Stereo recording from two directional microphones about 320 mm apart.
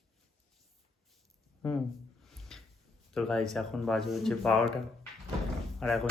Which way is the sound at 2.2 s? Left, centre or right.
Centre.